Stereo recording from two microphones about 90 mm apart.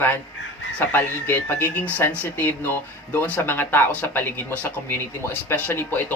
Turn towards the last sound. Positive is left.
turn(degrees=20)  # may be behind; listen again after turning